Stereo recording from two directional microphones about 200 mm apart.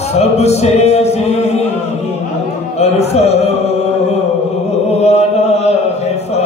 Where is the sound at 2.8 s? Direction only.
30° left (ahead or behind).